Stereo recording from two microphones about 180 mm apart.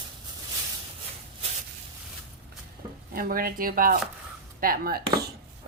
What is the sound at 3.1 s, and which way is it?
Sizzle, 55° right (ahead or behind).